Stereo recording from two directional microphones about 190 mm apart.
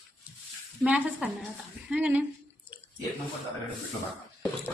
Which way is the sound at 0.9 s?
5° right (ahead or behind).